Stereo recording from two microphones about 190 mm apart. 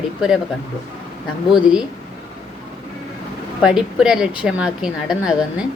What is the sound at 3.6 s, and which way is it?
A woman's voice, 5° right (ahead or behind).